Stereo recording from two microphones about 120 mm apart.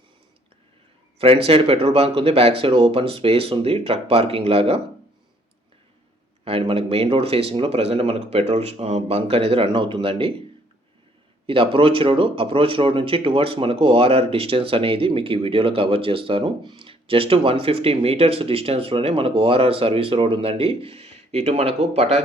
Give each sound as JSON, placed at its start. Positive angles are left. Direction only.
{"t": 1.2, "sound": "speech", "side_deg": -55}
{"t": 6.4, "sound": "speech", "side_deg": -50}
{"t": 11.4, "sound": "speech", "side_deg": -50}